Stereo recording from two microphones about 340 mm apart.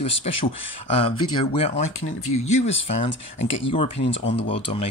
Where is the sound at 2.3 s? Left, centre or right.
Centre.